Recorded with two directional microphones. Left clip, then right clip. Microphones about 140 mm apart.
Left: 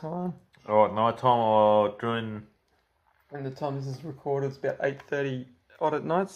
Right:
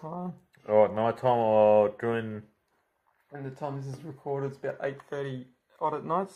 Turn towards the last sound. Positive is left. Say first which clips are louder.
# left 3 dB
turn(degrees=20)  # may be behind; listen again after turning